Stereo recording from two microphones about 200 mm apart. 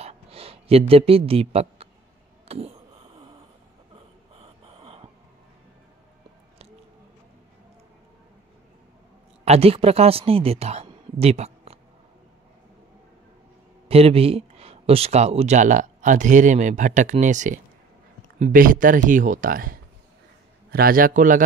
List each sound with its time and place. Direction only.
0.0 s a sound: 30° right (ahead or behind)
9.4 s speech: 30° right (ahead or behind)
13.8 s speech: 30° right (ahead or behind)